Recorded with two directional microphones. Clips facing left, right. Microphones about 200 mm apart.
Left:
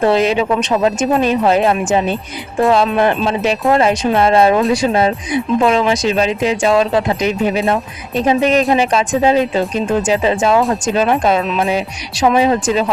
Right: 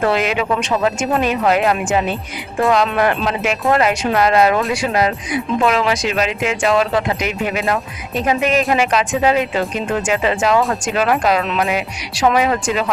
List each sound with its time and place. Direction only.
0.0 s speech: 30° left (ahead or behind)